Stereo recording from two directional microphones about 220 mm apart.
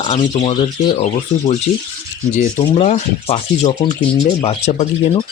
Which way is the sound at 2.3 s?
30° left (ahead or behind).